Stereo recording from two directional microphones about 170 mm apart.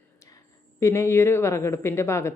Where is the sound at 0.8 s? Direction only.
15° left (ahead or behind).